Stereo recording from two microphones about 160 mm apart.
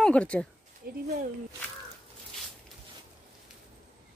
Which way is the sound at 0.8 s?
75° right (ahead or behind).